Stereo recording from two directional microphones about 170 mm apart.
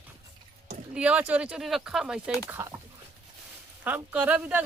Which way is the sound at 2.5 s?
15° right (ahead or behind).